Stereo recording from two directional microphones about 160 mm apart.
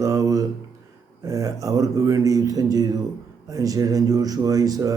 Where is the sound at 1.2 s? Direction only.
20° right (ahead or behind).